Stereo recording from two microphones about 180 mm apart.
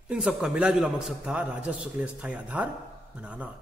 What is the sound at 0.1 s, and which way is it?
A man's voice, 5° right (ahead or behind).